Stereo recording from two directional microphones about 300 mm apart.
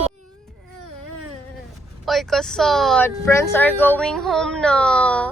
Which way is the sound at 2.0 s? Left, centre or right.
Centre.